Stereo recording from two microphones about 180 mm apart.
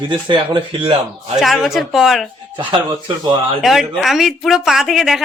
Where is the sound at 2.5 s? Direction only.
25° right (ahead or behind).